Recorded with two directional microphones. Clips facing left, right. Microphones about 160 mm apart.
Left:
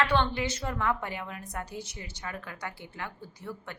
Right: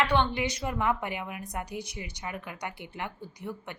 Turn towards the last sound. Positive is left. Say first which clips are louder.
# right 2 dB
turn(degrees=-15)  # may be behind; listen again after turning